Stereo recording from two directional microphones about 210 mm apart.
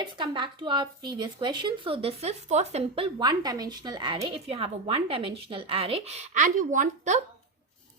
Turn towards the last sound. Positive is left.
turn(degrees=-35)  # may be behind; listen again after turning